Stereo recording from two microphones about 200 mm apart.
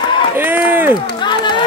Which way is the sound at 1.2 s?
20° left (ahead or behind).